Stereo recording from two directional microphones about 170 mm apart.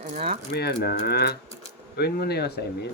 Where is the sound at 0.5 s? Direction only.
75° left (ahead or behind).